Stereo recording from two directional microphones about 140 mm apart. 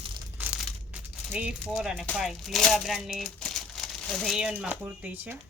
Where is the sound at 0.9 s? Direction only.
10° right (ahead or behind).